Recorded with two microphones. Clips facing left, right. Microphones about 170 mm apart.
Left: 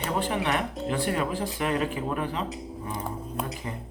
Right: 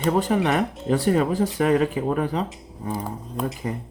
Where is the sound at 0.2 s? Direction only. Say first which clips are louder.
Right 6 dB; 40° right (ahead or behind).